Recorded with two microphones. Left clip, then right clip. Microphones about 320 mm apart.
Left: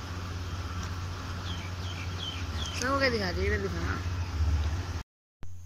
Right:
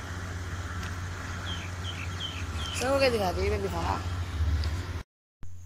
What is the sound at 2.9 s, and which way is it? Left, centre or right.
Speech, right.